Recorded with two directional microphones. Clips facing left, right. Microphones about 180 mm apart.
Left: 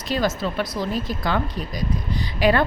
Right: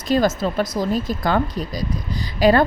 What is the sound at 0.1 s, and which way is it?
Speech, 45° right (ahead or behind).